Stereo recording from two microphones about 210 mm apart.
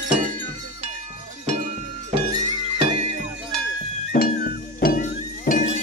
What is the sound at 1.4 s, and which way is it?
Cowbell, 30° right (ahead or behind).